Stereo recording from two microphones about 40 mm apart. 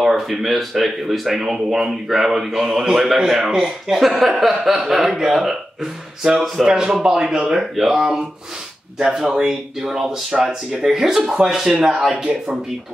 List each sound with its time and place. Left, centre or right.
0.0 s speech: centre
7.6 s speech: centre